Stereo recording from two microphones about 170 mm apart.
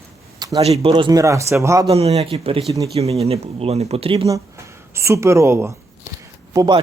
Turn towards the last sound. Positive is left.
turn(degrees=-20)  # may be behind; listen again after turning